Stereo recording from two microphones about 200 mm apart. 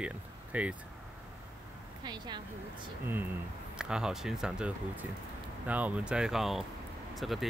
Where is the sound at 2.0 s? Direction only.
20° right (ahead or behind).